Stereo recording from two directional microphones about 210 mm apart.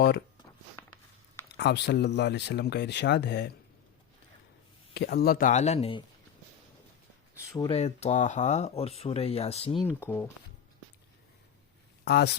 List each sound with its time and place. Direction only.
1.5 s speech: 55° left (ahead or behind)
4.9 s speech: 50° left (ahead or behind); by 6.0 s 30° left (ahead or behind)
7.7 s speech: 30° left (ahead or behind)
9.8 s speech: 10° left (ahead or behind)
12.0 s speech: 50° left (ahead or behind)